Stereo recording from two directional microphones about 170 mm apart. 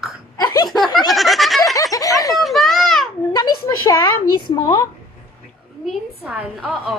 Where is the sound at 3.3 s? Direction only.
20° left (ahead or behind).